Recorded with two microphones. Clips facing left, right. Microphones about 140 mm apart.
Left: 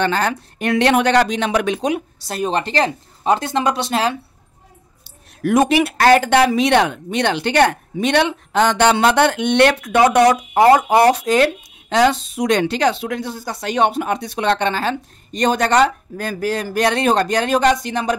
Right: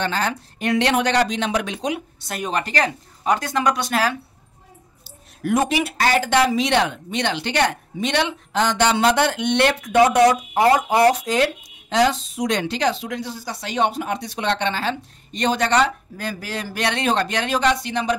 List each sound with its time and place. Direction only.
0.0 s speech: 55° left (ahead or behind); by 4.2 s 25° left (ahead or behind)
5.4 s speech: 80° left; by 18.1 s 45° left (ahead or behind)